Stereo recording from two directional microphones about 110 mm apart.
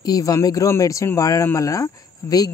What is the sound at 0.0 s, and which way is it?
Speech, 35° left (ahead or behind).